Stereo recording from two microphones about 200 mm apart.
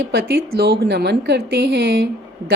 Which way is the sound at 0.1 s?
55° right (ahead or behind).